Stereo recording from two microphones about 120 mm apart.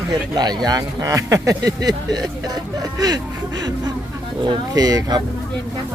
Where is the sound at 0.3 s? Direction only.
35° right (ahead or behind).